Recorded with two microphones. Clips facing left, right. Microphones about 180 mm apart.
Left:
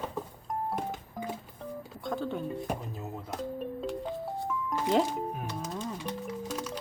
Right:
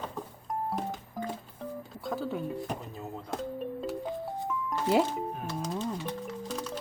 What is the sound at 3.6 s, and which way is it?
Music, 5° right (ahead or behind).